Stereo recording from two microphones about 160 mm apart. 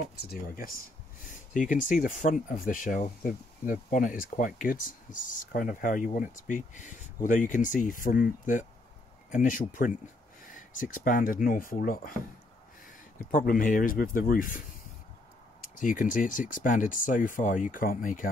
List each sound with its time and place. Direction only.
0.1 s speech: 75° left (ahead or behind); by 12.1 s 60° left (ahead or behind)
13.3 s speech: 55° left (ahead or behind)
15.8 s speech: 55° left (ahead or behind)